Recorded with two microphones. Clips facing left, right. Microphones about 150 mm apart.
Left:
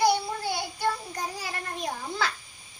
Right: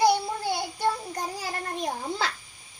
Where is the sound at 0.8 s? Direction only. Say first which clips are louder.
Even; 25° right (ahead or behind).